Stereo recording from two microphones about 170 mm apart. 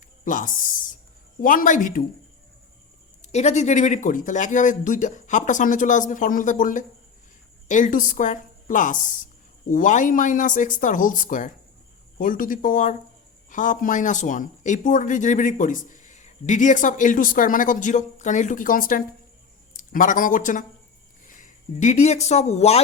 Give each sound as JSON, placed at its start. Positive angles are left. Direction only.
{"t": 0.3, "sound": "speech", "side_deg": 50}
{"t": 3.2, "sound": "a man's voice", "side_deg": 40}